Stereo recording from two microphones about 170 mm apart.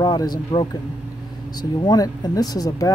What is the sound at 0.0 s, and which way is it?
Speech, 25° left (ahead or behind).